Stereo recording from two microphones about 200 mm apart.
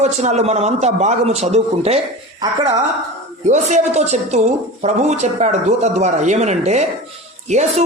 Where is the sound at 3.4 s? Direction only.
35° right (ahead or behind).